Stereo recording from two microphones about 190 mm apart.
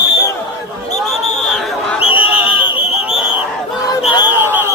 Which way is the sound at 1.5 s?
Centre (ahead or behind).